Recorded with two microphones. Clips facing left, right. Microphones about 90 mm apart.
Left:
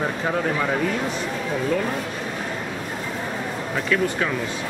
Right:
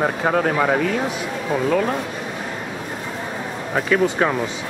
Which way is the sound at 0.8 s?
Centre (ahead or behind).